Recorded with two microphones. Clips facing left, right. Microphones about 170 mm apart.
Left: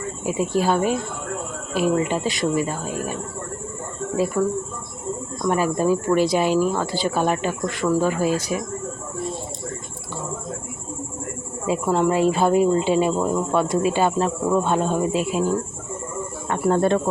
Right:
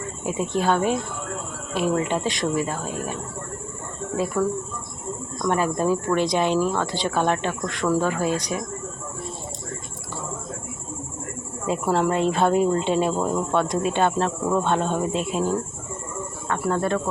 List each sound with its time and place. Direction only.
0.3 s a woman's voice: 5° left (ahead or behind)
4.4 s a woman's voice: 5° left (ahead or behind)
11.6 s a woman's voice: centre (ahead or behind)
16.5 s speech: 25° left (ahead or behind)